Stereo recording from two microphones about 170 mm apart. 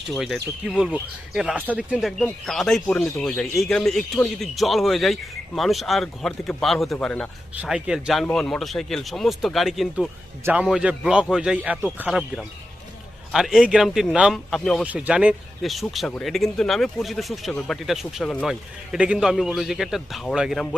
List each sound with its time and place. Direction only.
0.7 s speech: 5° right (ahead or behind)
7.5 s speech: 5° right (ahead or behind)